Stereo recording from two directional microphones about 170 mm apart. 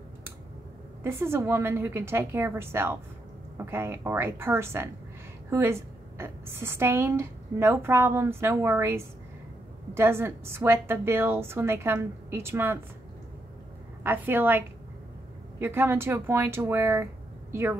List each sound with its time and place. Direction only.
1.0 s a woman's voice: 15° right (ahead or behind)
14.0 s a woman's voice: 15° right (ahead or behind)
15.6 s a woman's voice: 15° right (ahead or behind)